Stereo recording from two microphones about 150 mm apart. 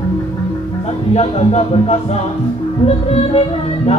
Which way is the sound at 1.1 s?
45° left (ahead or behind).